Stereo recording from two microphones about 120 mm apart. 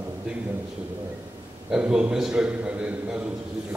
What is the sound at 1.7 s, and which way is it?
A man's voice, 5° right (ahead or behind).